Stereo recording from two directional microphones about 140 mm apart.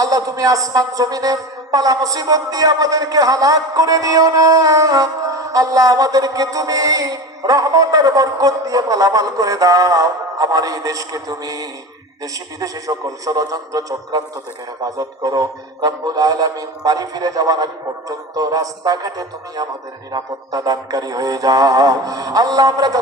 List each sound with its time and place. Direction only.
0.0 s a man's voice: 25° right (ahead or behind)